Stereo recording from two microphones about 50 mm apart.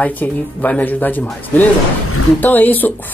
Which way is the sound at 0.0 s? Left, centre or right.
Left.